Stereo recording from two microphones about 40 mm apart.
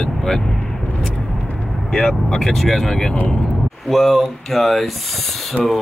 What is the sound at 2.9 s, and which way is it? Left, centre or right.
Speech, centre.